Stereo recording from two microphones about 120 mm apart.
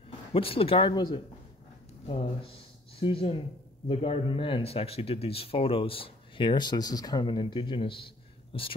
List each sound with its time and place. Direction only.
0.3 s speech: 50° left (ahead or behind)
0.9 s speech: 40° left (ahead or behind)
2.0 s speech: 50° left (ahead or behind)